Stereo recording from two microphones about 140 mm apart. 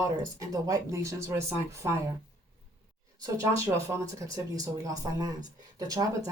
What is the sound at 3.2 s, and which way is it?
Speech, 20° right (ahead or behind).